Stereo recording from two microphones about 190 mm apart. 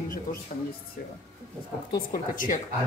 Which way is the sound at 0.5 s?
45° left (ahead or behind).